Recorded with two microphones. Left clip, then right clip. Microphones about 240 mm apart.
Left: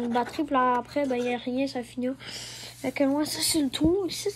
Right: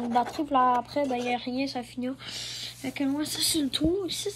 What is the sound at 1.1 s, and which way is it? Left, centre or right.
Speech, centre.